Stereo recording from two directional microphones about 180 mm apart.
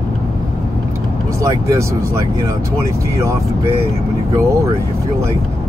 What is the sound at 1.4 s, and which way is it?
Speech, 15° right (ahead or behind).